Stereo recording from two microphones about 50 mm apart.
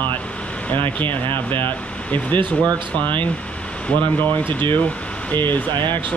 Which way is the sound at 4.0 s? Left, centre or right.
Left.